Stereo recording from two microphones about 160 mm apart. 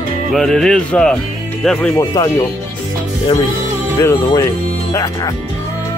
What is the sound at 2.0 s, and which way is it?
Speech, 20° left (ahead or behind).